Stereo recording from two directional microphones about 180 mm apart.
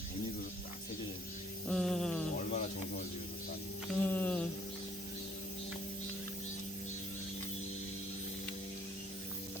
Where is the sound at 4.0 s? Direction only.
10° left (ahead or behind).